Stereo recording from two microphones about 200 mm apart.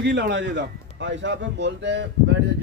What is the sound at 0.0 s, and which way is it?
A man's voice, 60° right (ahead or behind).